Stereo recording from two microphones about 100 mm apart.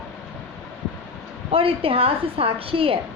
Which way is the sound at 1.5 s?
70° right (ahead or behind).